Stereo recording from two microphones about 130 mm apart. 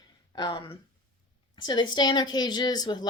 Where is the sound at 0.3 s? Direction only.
35° left (ahead or behind).